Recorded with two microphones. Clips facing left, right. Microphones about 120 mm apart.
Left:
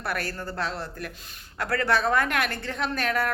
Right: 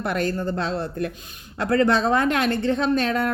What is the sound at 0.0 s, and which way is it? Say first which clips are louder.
A woman's voice: right 7 dB; 20° right (ahead or behind).